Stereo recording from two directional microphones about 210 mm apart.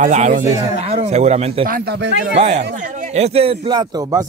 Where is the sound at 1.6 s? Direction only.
45° right (ahead or behind).